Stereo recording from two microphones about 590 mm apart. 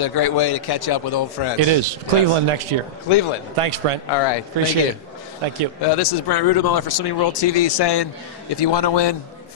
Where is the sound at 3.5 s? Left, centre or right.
Right.